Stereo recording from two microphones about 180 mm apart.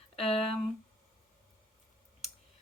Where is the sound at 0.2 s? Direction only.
35° left (ahead or behind).